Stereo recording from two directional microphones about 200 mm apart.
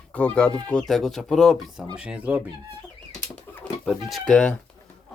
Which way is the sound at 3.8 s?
Centre (ahead or behind).